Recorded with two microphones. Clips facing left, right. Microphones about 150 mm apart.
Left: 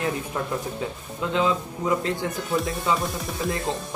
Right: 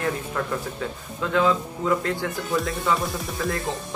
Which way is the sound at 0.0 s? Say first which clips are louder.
Right 1 dB; 20° left (ahead or behind).